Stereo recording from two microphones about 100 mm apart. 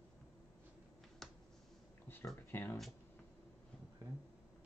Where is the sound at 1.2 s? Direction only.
5° left (ahead or behind).